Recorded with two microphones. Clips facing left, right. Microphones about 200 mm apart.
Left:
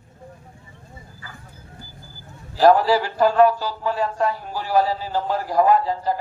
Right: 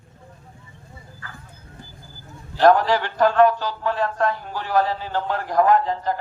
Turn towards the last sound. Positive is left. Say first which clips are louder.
# even
turn(degrees=10)  # may be behind; listen again after turning